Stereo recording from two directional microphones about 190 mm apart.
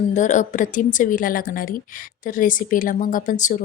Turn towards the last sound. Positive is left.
turn(degrees=40)  # may be behind; listen again after turning